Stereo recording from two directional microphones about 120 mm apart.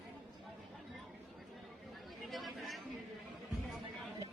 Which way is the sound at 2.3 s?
Centre (ahead or behind).